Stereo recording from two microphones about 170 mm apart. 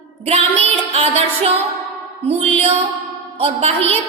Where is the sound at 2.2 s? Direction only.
35° right (ahead or behind).